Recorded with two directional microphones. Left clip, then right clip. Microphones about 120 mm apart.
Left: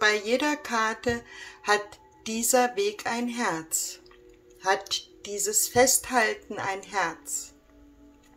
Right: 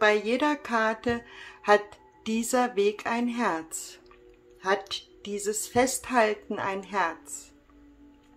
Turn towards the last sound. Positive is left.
turn(degrees=-35)  # may be behind; listen again after turning